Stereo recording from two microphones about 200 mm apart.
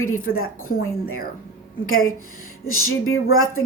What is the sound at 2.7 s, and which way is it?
Speech, 90° left.